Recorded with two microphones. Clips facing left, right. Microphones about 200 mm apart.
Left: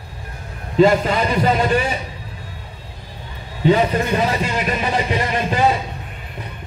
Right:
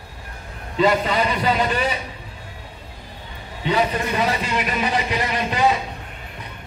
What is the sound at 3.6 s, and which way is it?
A man's voice, 35° left (ahead or behind).